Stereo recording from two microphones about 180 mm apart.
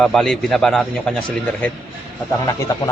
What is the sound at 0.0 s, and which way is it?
A man's voice, centre (ahead or behind).